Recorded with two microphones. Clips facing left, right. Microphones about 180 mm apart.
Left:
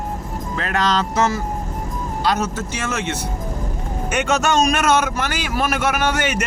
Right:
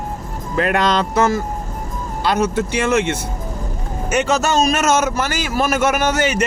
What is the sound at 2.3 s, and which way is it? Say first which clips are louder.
Speech: right 5 dB; 60° right (ahead or behind).